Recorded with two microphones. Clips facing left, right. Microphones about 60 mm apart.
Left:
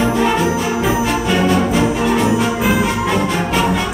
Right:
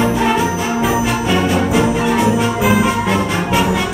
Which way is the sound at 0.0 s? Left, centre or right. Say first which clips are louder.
Even; centre.